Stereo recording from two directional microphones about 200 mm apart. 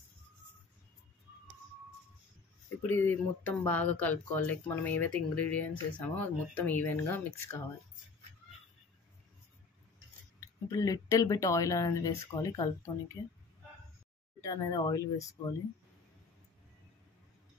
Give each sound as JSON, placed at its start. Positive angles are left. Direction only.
{"t": 2.9, "sound": "speech", "side_deg": 10}
{"t": 10.4, "sound": "speech", "side_deg": 15}
{"t": 14.4, "sound": "speech", "side_deg": 15}